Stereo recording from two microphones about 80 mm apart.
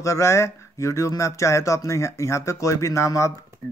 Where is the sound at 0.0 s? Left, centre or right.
Left.